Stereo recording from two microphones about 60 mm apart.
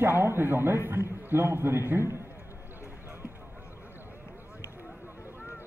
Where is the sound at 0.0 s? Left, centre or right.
Right.